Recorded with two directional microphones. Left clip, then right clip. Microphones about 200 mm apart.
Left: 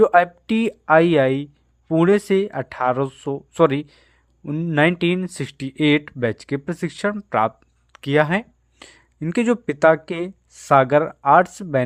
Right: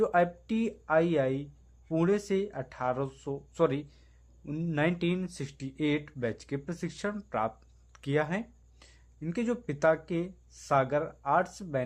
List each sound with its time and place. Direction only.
0.0 s speech: 40° left (ahead or behind)